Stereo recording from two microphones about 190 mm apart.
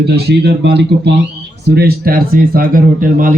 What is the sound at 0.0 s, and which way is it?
A man's voice, 60° right (ahead or behind).